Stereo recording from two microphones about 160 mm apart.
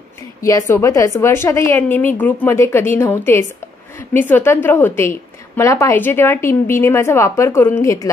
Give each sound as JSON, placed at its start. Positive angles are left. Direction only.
{"t": 0.4, "sound": "a woman's voice", "side_deg": 20}